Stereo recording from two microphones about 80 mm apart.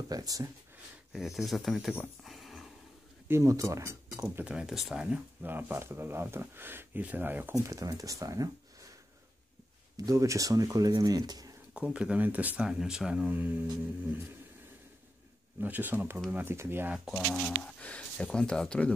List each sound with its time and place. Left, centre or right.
0.1 s speech: right
1.1 s speech: centre
2.2 s a sound: centre
3.3 s speech: right
4.5 s speech: centre
5.4 s speech: right
7.5 s speech: right
9.9 s speech: right
11.7 s speech: centre
15.6 s speech: right
17.1 s speech: centre
17.6 s speech: centre